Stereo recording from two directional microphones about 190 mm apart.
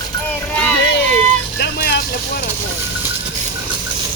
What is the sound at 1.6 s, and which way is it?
Vehicle, 55° left (ahead or behind).